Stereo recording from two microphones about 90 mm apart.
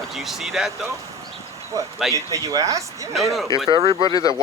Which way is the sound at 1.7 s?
40° right (ahead or behind).